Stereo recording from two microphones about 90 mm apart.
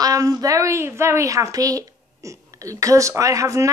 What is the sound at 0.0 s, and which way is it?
A woman's voice, 40° right (ahead or behind).